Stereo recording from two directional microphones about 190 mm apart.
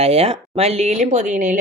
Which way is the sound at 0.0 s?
30° right (ahead or behind).